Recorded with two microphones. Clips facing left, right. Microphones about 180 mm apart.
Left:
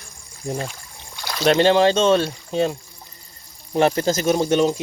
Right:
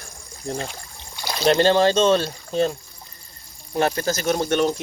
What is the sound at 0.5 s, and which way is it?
Speech, 30° right (ahead or behind).